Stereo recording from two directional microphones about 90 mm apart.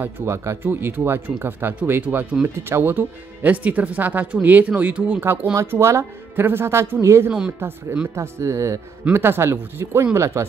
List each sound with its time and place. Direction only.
0.0 s speech: 30° right (ahead or behind)
7.6 s speech: 20° right (ahead or behind)
8.1 s speech: 30° right (ahead or behind)